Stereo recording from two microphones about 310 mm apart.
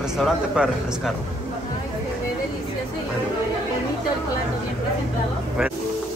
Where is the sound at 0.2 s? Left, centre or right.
Centre.